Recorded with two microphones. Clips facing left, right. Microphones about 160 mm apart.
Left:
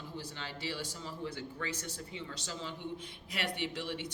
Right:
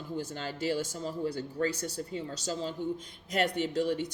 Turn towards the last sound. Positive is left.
turn(degrees=-40)  # may be behind; listen again after turning